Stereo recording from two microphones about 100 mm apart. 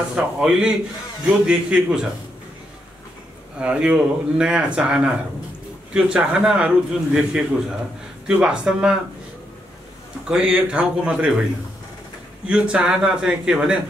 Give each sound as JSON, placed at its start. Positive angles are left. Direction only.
{"t": 0.1, "sound": "speech", "side_deg": -5}
{"t": 3.5, "sound": "speech", "side_deg": -10}
{"t": 10.2, "sound": "speech", "side_deg": -10}
{"t": 12.4, "sound": "speech", "side_deg": -10}